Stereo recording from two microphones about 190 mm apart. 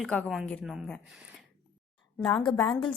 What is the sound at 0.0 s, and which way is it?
A woman's voice, centre (ahead or behind).